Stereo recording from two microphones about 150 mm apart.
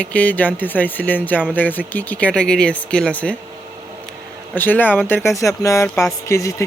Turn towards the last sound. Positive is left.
turn(degrees=20)  # may be behind; listen again after turning